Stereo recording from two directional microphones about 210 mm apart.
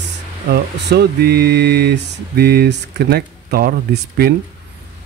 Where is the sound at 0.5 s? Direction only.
50° right (ahead or behind).